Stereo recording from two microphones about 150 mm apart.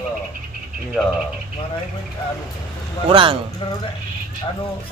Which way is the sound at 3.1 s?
35° right (ahead or behind).